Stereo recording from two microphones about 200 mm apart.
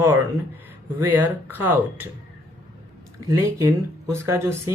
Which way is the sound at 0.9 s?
10° right (ahead or behind).